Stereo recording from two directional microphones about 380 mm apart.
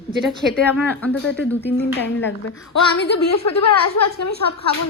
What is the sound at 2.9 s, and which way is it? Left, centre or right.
Speech, left.